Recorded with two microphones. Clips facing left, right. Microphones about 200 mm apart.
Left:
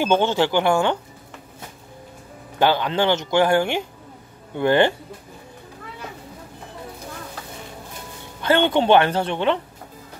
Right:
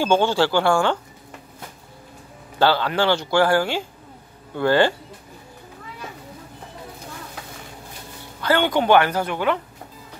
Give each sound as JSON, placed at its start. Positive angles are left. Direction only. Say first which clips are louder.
{"t": 0.0, "sound": "speech", "louder": "even", "side_deg": 20}
{"t": 2.6, "sound": "speech", "louder": "even", "side_deg": 15}
{"t": 8.4, "sound": "speech", "louder": "left 2 dB", "side_deg": 25}